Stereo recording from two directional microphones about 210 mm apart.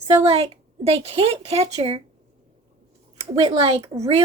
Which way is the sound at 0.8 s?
30° right (ahead or behind).